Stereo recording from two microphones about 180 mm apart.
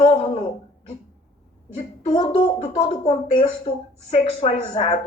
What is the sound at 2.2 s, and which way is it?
A woman's voice, 25° left (ahead or behind).